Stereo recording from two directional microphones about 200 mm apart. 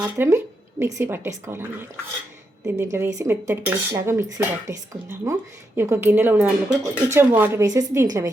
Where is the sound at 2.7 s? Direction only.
15° right (ahead or behind).